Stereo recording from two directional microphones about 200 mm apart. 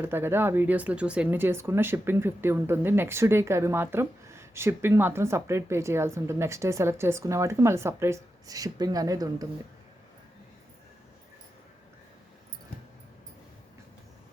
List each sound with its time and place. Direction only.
0.0 s speech: 10° right (ahead or behind)